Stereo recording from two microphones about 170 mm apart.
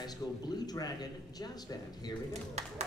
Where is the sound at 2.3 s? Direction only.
40° right (ahead or behind).